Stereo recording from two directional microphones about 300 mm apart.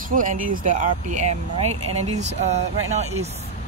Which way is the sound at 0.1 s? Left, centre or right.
Right.